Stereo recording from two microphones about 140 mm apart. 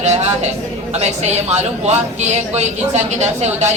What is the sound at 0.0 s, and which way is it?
A man's voice, 55° right (ahead or behind).